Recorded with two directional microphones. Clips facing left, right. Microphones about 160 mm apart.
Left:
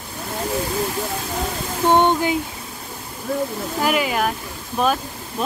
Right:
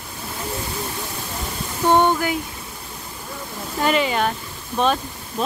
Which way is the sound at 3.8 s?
5° left (ahead or behind).